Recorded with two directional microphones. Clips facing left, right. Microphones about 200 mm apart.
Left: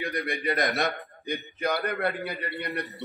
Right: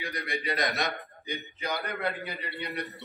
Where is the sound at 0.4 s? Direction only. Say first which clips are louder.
Left 3 dB; 50° left (ahead or behind).